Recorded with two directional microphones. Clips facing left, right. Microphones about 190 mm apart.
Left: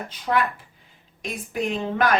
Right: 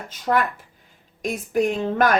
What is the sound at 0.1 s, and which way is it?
A woman's voice, 45° right (ahead or behind).